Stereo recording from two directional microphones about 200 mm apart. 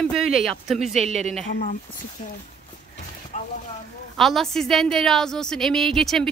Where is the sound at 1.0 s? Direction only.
35° right (ahead or behind).